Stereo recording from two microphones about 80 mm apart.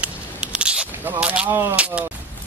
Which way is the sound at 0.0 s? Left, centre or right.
Centre.